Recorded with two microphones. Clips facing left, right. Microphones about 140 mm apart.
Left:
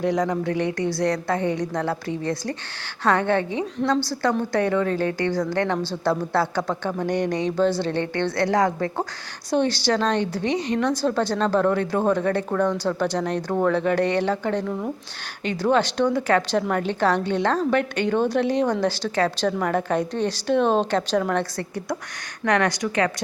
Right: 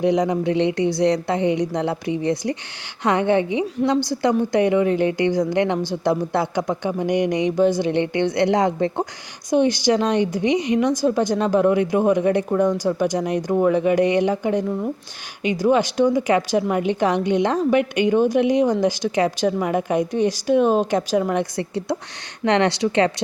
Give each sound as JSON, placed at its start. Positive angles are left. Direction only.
{"t": 0.0, "sound": "a woman's voice", "side_deg": -20}
{"t": 21.5, "sound": "a woman's voice", "side_deg": -25}